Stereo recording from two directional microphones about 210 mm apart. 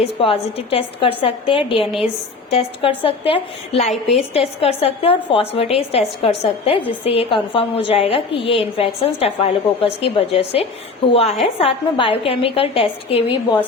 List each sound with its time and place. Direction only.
0.0 s a woman's voice: 25° left (ahead or behind)